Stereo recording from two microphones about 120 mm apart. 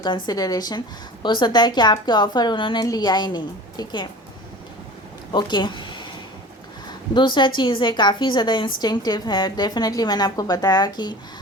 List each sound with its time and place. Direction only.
0.0 s a woman's voice: 35° left (ahead or behind)
5.3 s a woman's voice: 40° left (ahead or behind)
7.1 s a woman's voice: 40° left (ahead or behind)